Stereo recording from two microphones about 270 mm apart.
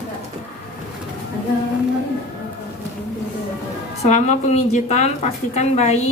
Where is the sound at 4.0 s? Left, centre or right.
Left.